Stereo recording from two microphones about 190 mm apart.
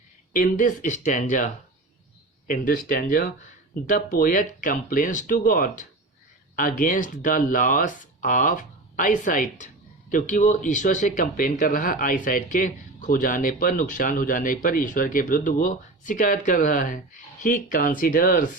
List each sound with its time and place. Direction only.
0.3 s speech: 45° left (ahead or behind)
2.5 s speech: 50° left (ahead or behind)